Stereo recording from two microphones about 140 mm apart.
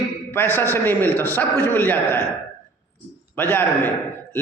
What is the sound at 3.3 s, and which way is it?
Speech, 15° left (ahead or behind).